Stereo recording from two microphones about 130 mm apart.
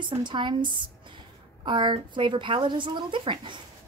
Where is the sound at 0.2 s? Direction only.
35° right (ahead or behind).